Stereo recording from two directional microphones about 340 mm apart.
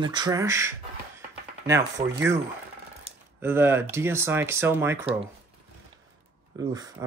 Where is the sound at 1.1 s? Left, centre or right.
Centre.